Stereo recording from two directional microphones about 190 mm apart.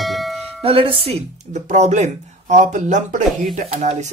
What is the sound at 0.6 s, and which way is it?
Speech, 30° right (ahead or behind).